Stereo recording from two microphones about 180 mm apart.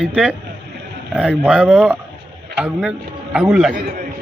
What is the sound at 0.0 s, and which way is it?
A man's voice, 5° right (ahead or behind).